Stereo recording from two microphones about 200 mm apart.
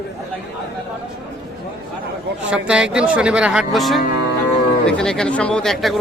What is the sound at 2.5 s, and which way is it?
Speech, 5° right (ahead or behind).